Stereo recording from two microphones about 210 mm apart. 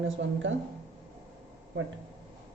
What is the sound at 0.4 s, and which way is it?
Speech, 65° right (ahead or behind).